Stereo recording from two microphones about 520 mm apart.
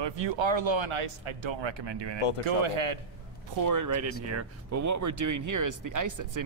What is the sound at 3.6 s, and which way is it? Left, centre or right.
Speech, right.